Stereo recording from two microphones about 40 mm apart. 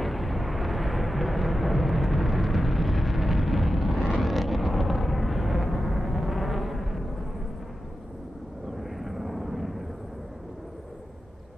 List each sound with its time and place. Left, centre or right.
0.0 s a sound: centre
4.1 s vehicle: centre
8.7 s vehicle: centre